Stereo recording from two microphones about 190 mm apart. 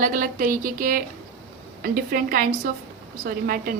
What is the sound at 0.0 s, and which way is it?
A woman's voice, 45° right (ahead or behind).